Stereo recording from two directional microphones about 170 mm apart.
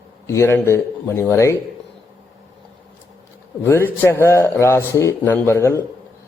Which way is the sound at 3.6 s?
15° left (ahead or behind).